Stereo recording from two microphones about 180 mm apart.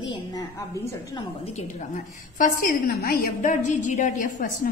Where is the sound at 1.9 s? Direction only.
55° left (ahead or behind).